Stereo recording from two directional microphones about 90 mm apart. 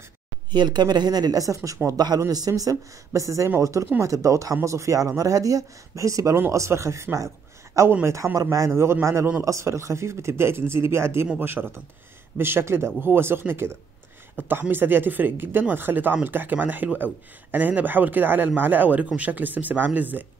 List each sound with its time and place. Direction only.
0.5 s speech: 55° right (ahead or behind); by 20.2 s 20° right (ahead or behind)